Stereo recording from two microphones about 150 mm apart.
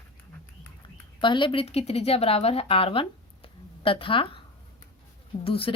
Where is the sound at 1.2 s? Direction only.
35° left (ahead or behind).